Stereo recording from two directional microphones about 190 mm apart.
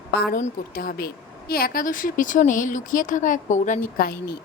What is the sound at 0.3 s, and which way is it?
Speech, 50° left (ahead or behind).